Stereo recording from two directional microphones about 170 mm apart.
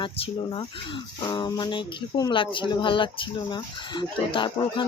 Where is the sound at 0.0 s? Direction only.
30° left (ahead or behind).